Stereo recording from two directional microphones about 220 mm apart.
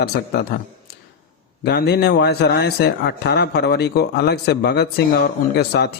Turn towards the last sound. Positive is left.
turn(degrees=50)  # may be behind; listen again after turning